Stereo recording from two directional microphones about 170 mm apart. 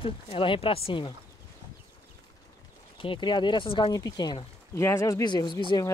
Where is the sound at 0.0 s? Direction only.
30° left (ahead or behind).